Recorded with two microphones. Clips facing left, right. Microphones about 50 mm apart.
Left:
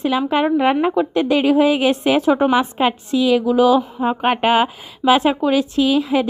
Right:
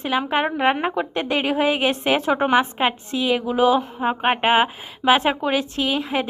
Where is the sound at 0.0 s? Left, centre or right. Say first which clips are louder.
Left 4 dB; right.